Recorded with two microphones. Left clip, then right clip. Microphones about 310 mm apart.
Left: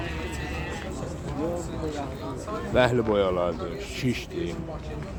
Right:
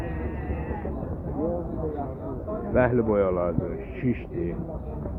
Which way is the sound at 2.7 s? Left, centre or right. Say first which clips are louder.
Even; left.